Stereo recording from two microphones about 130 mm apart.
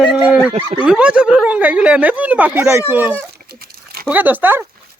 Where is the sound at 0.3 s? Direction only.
15° right (ahead or behind).